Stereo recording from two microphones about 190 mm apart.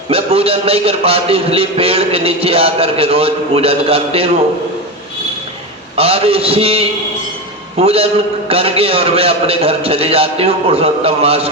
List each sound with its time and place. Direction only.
0.1 s a man's voice: 30° right (ahead or behind)
6.0 s a man's voice: 30° right (ahead or behind)